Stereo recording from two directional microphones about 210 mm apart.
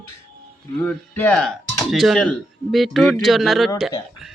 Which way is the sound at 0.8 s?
5° left (ahead or behind).